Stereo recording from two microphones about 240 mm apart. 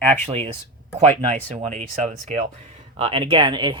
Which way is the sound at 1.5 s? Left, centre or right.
Right.